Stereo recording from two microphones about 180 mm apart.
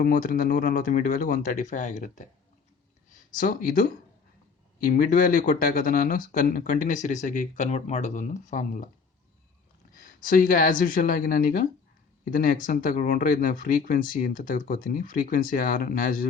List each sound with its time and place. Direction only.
0.0 s speech: 50° left (ahead or behind)
3.3 s speech: 50° left (ahead or behind)
9.9 s speech: 50° left (ahead or behind)